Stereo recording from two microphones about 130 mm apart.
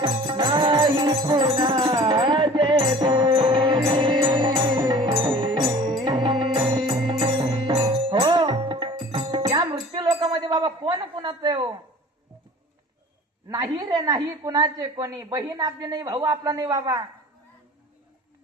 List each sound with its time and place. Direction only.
0.0 s music: 35° right (ahead or behind)
10.3 s a sound: 30° right (ahead or behind)
13.5 s a woman's voice: 30° right (ahead or behind)